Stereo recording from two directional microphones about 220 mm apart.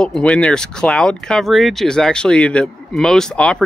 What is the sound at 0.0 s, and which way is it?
Speech, 5° left (ahead or behind).